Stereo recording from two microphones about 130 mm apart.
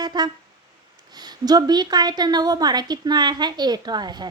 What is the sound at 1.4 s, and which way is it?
A woman's voice, 30° right (ahead or behind).